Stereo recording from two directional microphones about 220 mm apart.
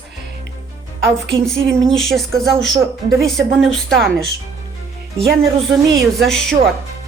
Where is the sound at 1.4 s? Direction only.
Centre (ahead or behind).